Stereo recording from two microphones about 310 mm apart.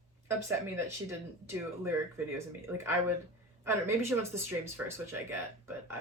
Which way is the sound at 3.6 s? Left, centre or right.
Centre.